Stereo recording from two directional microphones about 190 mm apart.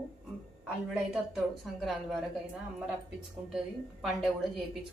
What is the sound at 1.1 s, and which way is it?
Speech, centre (ahead or behind).